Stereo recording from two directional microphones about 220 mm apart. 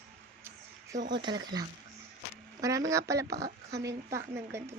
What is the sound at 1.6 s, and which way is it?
A woman's voice, 20° right (ahead or behind).